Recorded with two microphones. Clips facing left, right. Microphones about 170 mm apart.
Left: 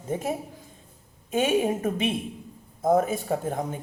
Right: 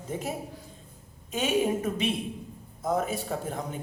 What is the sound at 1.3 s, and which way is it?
A man's voice, 50° left (ahead or behind).